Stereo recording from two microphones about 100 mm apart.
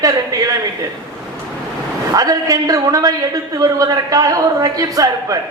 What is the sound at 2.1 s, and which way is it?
A woman's voice, 40° right (ahead or behind).